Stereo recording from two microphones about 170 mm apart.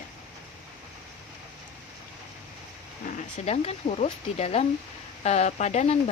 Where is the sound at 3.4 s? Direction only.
35° left (ahead or behind).